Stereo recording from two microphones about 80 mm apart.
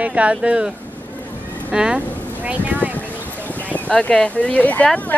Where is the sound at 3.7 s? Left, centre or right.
Centre.